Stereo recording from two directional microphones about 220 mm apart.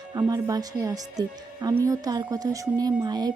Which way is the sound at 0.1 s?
15° right (ahead or behind).